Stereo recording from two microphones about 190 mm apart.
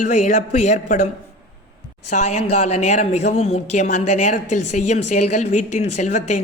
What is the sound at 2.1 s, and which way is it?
A woman's voice, 35° left (ahead or behind).